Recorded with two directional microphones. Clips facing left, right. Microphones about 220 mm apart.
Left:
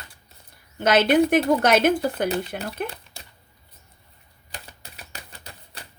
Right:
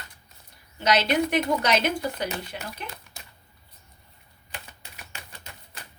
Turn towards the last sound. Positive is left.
turn(degrees=35)  # may be behind; listen again after turning